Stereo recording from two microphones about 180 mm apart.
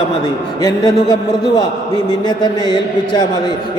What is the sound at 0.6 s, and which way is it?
A man's voice, 20° left (ahead or behind).